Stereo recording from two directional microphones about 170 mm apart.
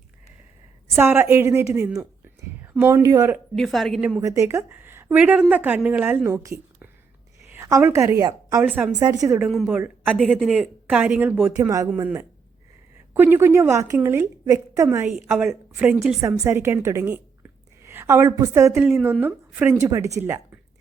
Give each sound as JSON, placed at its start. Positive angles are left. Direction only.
{"t": 0.9, "sound": "a woman's voice", "side_deg": -15}
{"t": 3.5, "sound": "a woman's voice", "side_deg": 0}
{"t": 4.2, "sound": "a woman's voice", "side_deg": -15}
{"t": 8.6, "sound": "a woman's voice", "side_deg": -10}
{"t": 9.0, "sound": "a woman's voice", "side_deg": -20}
{"t": 9.4, "sound": "a woman's voice", "side_deg": 0}
{"t": 9.6, "sound": "a woman's voice", "side_deg": -10}
{"t": 10.2, "sound": "a woman's voice", "side_deg": 0}
{"t": 18.8, "sound": "a woman's voice", "side_deg": 0}
{"t": 19.2, "sound": "a woman's voice", "side_deg": -15}